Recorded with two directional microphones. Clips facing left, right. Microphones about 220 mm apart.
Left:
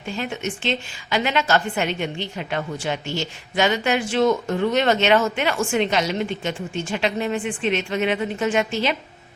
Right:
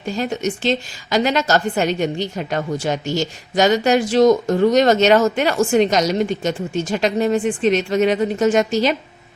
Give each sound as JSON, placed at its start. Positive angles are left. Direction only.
{"t": 0.0, "sound": "a woman's voice", "side_deg": -40}